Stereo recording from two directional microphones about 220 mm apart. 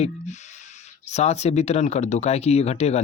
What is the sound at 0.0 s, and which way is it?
Speech, 30° left (ahead or behind).